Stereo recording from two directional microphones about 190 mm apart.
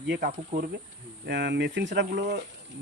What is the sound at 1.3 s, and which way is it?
Speech, 65° right (ahead or behind).